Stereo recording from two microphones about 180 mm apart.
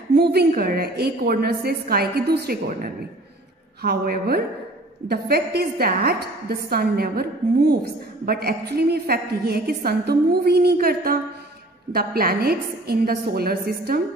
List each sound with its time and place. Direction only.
0.1 s a woman's voice: 65° right (ahead or behind)